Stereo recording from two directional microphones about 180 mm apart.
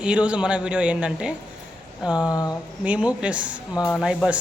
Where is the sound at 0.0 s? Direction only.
5° right (ahead or behind).